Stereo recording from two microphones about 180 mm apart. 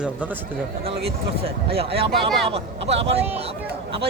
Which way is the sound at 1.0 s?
35° right (ahead or behind).